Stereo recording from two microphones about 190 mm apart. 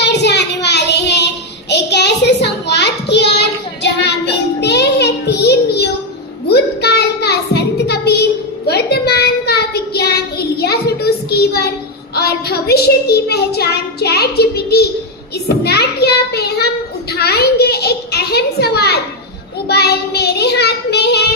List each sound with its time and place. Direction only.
0.0 s child singing: 65° left (ahead or behind)
6.5 s a sound: 60° left (ahead or behind)
19.6 s child singing: 55° left (ahead or behind)